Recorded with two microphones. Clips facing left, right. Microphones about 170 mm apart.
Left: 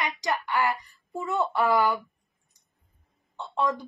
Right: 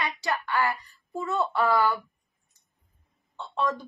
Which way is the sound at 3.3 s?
15° left (ahead or behind).